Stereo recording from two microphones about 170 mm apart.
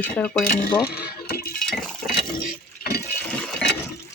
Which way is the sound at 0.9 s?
65° left (ahead or behind).